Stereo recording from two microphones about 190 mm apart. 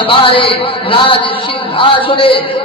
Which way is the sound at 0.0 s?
25° left (ahead or behind).